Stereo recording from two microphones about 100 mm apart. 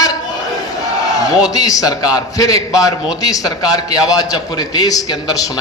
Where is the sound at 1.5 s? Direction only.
35° left (ahead or behind).